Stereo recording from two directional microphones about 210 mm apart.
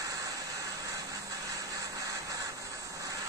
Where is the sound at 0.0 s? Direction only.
15° right (ahead or behind).